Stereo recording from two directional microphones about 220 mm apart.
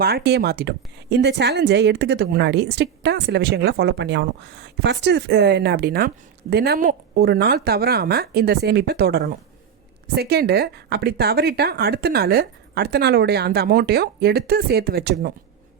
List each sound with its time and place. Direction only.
0.0 s a woman's voice: 45° right (ahead or behind)